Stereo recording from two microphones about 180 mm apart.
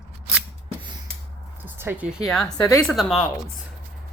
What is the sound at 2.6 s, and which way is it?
Speech, 15° left (ahead or behind).